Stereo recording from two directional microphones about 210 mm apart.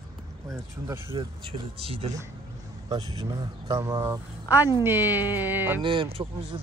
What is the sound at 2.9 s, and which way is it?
Speech, 15° right (ahead or behind).